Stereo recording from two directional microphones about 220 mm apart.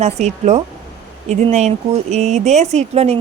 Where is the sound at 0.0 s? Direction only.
30° right (ahead or behind).